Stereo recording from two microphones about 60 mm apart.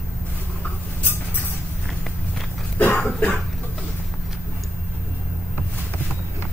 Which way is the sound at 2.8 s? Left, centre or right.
Left.